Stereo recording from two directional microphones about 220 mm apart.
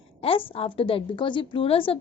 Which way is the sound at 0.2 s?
25° left (ahead or behind).